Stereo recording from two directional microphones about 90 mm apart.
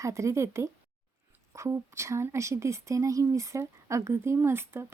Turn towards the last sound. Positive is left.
turn(degrees=-25)  # may be behind; listen again after turning